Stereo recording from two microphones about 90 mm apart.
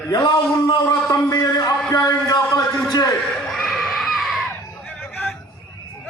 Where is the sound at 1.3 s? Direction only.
45° left (ahead or behind).